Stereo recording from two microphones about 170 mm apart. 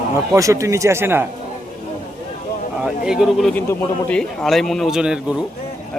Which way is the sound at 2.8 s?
5° right (ahead or behind).